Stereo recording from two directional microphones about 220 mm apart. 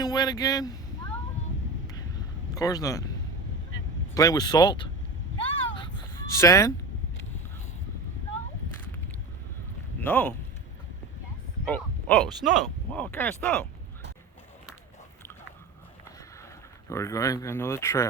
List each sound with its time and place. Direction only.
0.0 s speech: 20° left (ahead or behind)
2.6 s speech: 15° left (ahead or behind)
4.1 s speech: 15° left (ahead or behind)
5.5 s a sound: 20° left (ahead or behind)
10.0 s speech: 10° left (ahead or behind)
11.7 s speech: 5° left (ahead or behind)
16.9 s speech: 15° left (ahead or behind)